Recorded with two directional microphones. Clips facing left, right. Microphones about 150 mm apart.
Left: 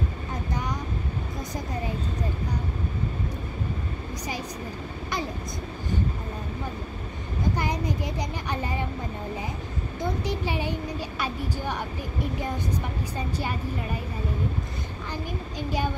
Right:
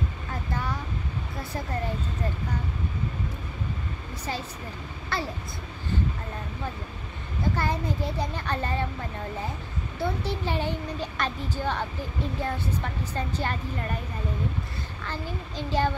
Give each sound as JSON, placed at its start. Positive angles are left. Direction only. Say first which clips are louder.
{"t": 0.3, "sound": "boat", "louder": "even", "side_deg": 15}
{"t": 5.1, "sound": "speech", "louder": "even", "side_deg": 15}
{"t": 7.5, "sound": "speech", "louder": "even", "side_deg": 15}
{"t": 9.9, "sound": "speech", "louder": "even", "side_deg": 15}
{"t": 15.0, "sound": "speech", "louder": "even", "side_deg": 15}